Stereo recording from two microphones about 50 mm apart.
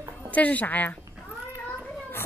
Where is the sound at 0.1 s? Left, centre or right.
Left.